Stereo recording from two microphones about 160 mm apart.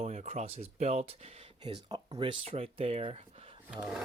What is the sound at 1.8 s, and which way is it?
Speech, 30° right (ahead or behind).